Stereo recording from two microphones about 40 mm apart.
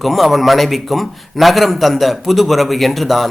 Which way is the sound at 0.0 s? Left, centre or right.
Centre.